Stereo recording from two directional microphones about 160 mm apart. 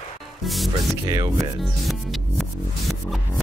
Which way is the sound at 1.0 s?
20° right (ahead or behind).